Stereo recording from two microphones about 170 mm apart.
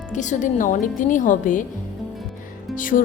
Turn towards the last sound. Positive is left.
turn(degrees=50)  # may be behind; listen again after turning